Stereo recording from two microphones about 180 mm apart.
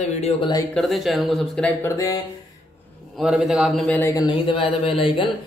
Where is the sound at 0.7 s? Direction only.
Centre (ahead or behind).